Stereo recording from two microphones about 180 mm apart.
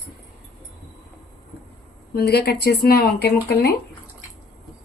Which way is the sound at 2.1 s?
60° left (ahead or behind).